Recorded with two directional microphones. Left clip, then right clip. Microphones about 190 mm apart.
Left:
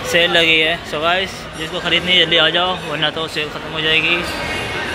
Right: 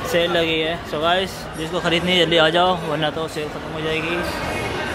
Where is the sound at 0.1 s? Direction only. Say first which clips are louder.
Left 6 dB; 5° right (ahead or behind).